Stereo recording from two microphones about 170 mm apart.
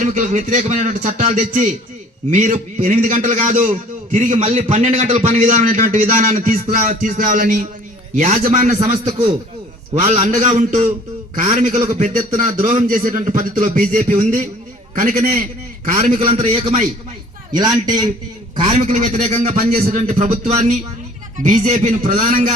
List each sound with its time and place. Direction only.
0.0 s a man's voice: 45° right (ahead or behind)
9.0 s a man's voice: 30° right (ahead or behind)
9.9 s a man's voice: 45° right (ahead or behind)
11.8 s a man's voice: 30° right (ahead or behind)
12.5 s a man's voice: 45° right (ahead or behind)
16.2 s a man's voice: 35° right (ahead or behind)
18.7 s a man's voice: 45° right (ahead or behind)